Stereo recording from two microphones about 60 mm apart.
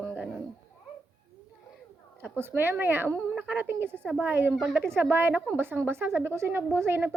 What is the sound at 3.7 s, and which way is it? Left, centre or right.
A woman's voice, right.